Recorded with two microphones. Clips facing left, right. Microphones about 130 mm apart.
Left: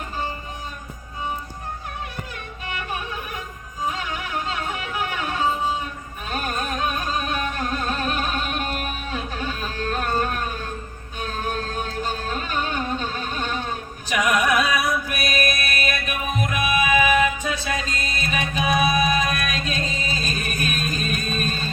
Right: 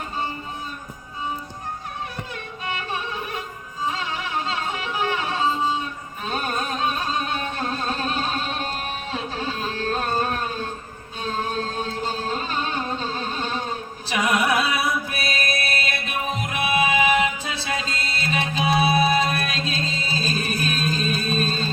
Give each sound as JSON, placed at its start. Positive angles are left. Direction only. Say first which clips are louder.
{"t": 2.3, "sound": "music", "louder": "right 2 dB", "side_deg": -30}